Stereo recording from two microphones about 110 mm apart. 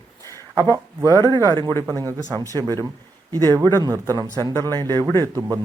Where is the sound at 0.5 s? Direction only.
30° right (ahead or behind).